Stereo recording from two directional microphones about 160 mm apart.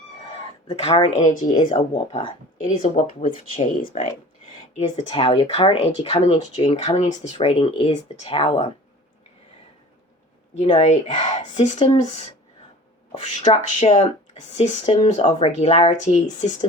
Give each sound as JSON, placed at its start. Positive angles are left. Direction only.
{"t": 0.7, "sound": "speech", "side_deg": 40}
{"t": 1.9, "sound": "speech", "side_deg": 40}
{"t": 10.8, "sound": "speech", "side_deg": 40}